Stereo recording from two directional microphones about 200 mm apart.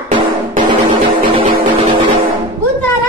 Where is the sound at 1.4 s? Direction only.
25° right (ahead or behind).